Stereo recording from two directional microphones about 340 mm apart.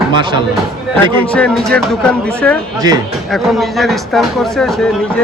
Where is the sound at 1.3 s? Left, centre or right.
Centre.